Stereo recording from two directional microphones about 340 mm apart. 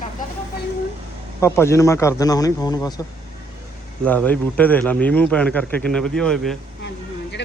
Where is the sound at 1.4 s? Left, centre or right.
Centre.